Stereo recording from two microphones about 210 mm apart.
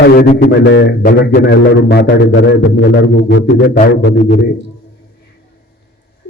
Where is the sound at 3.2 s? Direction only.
60° left (ahead or behind).